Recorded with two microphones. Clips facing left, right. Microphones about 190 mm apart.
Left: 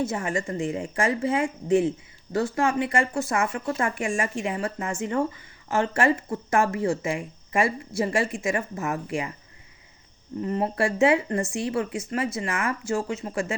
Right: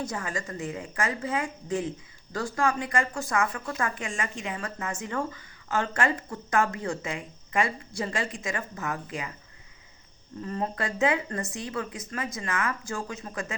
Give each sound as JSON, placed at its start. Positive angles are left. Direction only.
{"t": 0.0, "sound": "a woman's voice", "side_deg": 25}
{"t": 10.4, "sound": "a woman's voice", "side_deg": 25}